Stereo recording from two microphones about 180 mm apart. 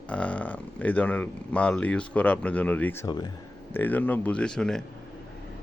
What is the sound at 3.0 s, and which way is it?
Speech, 25° left (ahead or behind).